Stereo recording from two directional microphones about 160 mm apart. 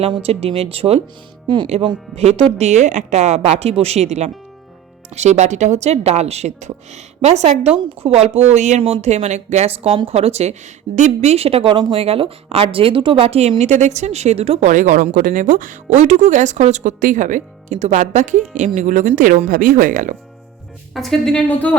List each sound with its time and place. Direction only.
0.0 s speech: 40° right (ahead or behind); by 20.1 s 55° right (ahead or behind)
20.9 s a woman's voice: centre (ahead or behind)